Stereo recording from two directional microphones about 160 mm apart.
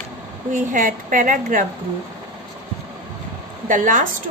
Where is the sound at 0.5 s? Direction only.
55° right (ahead or behind).